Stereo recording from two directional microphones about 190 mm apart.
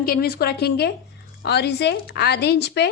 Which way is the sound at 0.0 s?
50° left (ahead or behind).